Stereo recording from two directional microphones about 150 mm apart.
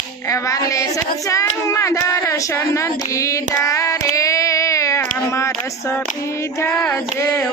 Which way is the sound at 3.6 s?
20° left (ahead or behind).